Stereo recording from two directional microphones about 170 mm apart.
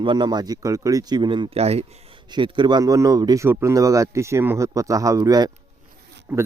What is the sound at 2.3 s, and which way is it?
Speech, 25° right (ahead or behind).